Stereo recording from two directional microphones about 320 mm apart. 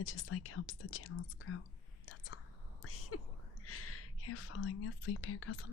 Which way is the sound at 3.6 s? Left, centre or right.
Left.